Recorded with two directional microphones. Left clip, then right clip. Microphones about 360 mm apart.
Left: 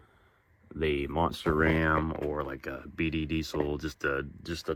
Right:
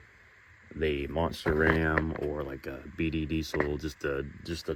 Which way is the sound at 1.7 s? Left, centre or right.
Left.